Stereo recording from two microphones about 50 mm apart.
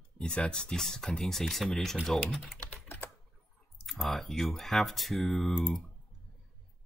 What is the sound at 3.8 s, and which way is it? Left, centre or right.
Speech, centre.